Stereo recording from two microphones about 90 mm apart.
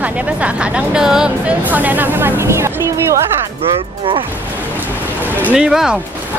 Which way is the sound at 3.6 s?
90° right.